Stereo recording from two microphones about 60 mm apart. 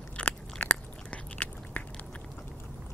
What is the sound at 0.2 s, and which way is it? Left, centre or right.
Biting, centre.